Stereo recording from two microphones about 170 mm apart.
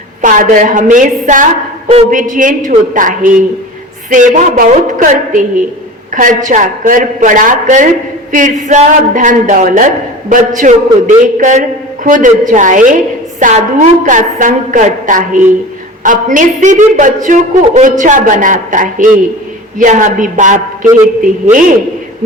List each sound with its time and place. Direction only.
0.2 s a woman's voice: 50° right (ahead or behind)